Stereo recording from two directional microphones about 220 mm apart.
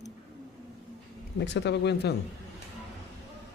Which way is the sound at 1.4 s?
50° left (ahead or behind).